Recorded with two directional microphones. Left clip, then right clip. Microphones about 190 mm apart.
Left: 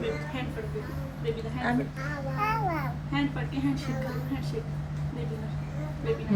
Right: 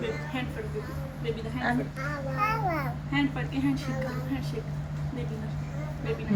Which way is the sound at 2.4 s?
30° right (ahead or behind).